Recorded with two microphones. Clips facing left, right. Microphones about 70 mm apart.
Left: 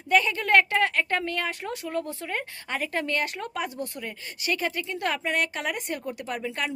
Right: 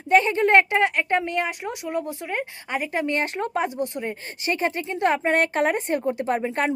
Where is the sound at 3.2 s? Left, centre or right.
Right.